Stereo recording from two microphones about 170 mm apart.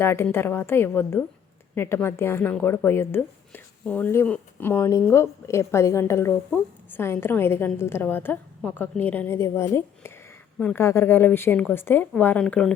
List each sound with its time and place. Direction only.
0.0 s a woman's voice: 15° left (ahead or behind)